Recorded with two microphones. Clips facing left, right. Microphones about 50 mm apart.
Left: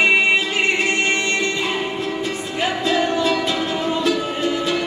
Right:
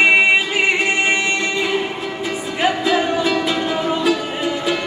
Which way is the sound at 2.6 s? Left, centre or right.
Centre.